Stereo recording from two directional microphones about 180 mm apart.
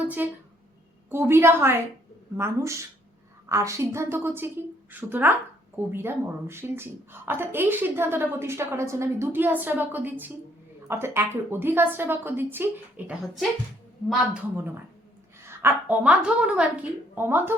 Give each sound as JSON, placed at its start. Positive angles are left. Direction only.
{"t": 0.0, "sound": "a sound", "side_deg": -10}
{"t": 1.1, "sound": "speech", "side_deg": -15}
{"t": 13.1, "sound": "speech", "side_deg": 0}
{"t": 15.4, "sound": "speech", "side_deg": -10}